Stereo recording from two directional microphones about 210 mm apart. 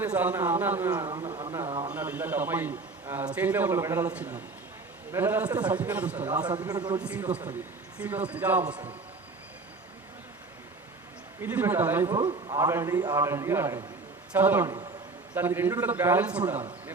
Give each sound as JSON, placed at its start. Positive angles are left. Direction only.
{"t": 0.0, "sound": "a man's voice", "side_deg": -10}
{"t": 1.0, "sound": "speech", "side_deg": -20}
{"t": 1.6, "sound": "speech", "side_deg": -25}
{"t": 1.9, "sound": "a man's voice", "side_deg": -10}
{"t": 6.4, "sound": "speech", "side_deg": -20}
{"t": 7.0, "sound": "a man's voice", "side_deg": -5}
{"t": 11.4, "sound": "a man's voice", "side_deg": -10}